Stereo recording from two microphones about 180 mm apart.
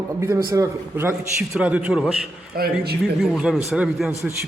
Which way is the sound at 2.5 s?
55° right (ahead or behind).